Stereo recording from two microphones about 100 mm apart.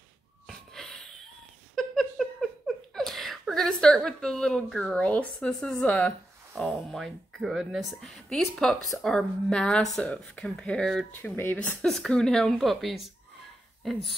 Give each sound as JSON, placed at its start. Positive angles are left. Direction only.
{"t": 0.5, "sound": "a sound", "side_deg": 5}
{"t": 1.8, "sound": "laughter", "side_deg": 0}
{"t": 5.5, "sound": "a woman's voice", "side_deg": 5}
{"t": 6.5, "sound": "a woman's voice", "side_deg": -5}
{"t": 11.2, "sound": "a woman's voice", "side_deg": 20}
{"t": 11.8, "sound": "a woman's voice", "side_deg": 5}